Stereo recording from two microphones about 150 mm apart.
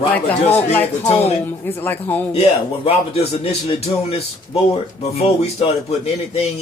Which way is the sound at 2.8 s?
40° left (ahead or behind).